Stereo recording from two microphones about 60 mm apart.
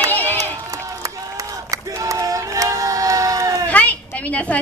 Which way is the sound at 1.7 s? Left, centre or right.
Right.